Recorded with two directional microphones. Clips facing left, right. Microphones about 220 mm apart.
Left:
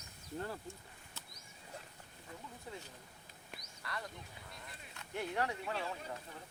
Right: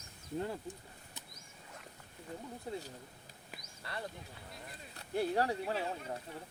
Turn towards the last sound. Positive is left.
turn(degrees=-35)  # may be behind; listen again after turning